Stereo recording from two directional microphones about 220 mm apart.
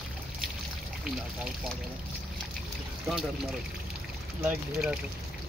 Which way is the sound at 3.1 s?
Centre (ahead or behind).